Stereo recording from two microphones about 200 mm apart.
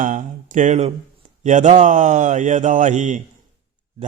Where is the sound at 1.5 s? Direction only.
35° right (ahead or behind).